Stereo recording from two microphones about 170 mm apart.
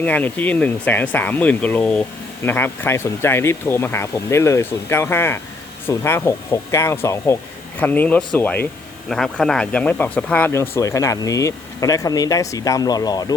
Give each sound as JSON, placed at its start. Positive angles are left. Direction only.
{"t": 0.0, "sound": "speech", "side_deg": 10}